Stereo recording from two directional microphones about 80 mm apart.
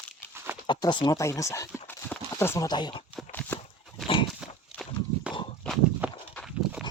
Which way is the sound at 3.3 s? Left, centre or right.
Left.